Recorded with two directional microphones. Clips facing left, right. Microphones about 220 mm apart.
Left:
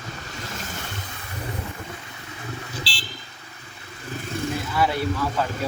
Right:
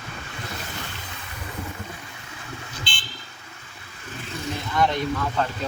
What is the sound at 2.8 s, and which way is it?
Vehicle, 35° left (ahead or behind).